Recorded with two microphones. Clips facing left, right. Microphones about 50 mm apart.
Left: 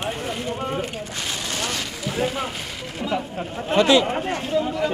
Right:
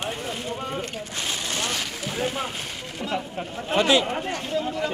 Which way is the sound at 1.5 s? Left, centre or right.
Centre.